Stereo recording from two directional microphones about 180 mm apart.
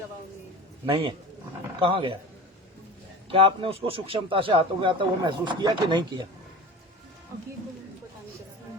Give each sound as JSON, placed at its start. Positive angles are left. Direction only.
{"t": 0.9, "sound": "a man's voice", "side_deg": -30}
{"t": 3.2, "sound": "a man's voice", "side_deg": -30}